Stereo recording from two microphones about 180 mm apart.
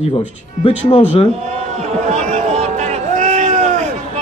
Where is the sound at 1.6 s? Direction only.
40° right (ahead or behind).